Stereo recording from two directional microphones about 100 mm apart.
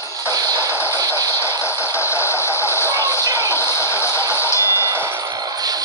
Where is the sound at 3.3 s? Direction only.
25° left (ahead or behind).